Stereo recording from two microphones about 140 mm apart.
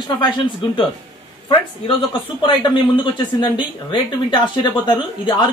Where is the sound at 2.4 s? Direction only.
35° left (ahead or behind).